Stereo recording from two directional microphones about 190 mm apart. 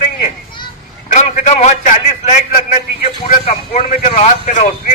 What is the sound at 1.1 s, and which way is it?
A man's voice, 40° left (ahead or behind).